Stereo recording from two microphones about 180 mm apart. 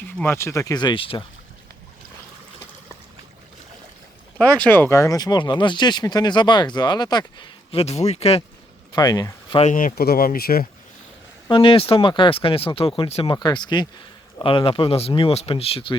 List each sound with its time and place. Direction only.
0.2 s speech: 15° left (ahead or behind); by 1.2 s 30° left (ahead or behind)
4.4 s speech: 5° left (ahead or behind); by 8.4 s 35° left (ahead or behind)
9.0 s speech: 20° left (ahead or behind)
9.6 s speech: 45° left (ahead or behind)
11.4 s speech: 30° left (ahead or behind)